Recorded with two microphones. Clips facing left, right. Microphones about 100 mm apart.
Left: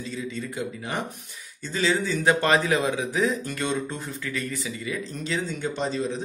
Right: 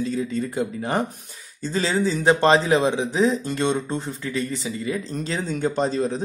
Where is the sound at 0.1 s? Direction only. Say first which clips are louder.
Right 7 dB; 40° right (ahead or behind).